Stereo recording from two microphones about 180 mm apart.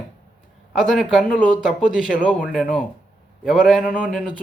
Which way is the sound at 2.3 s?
Centre (ahead or behind).